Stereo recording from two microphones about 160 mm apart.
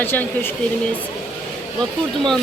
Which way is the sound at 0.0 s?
15° left (ahead or behind).